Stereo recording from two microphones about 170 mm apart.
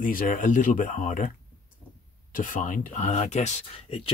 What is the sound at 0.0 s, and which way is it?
Speech, 50° left (ahead or behind).